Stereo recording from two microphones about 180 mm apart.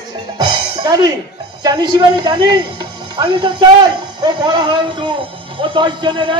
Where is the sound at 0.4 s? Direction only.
25° right (ahead or behind).